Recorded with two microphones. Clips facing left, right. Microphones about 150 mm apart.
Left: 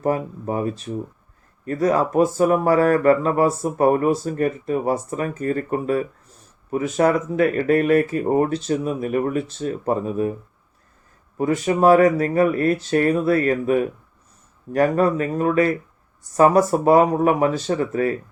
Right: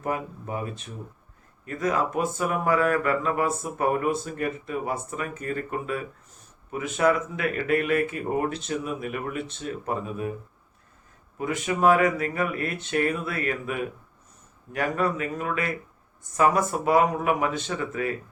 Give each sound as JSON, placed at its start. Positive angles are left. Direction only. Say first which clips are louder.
{"t": 0.0, "sound": "speech", "louder": "left 8 dB", "side_deg": 35}
{"t": 11.3, "sound": "speech", "louder": "left 7 dB", "side_deg": 40}